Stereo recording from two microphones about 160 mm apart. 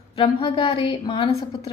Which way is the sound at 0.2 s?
35° left (ahead or behind).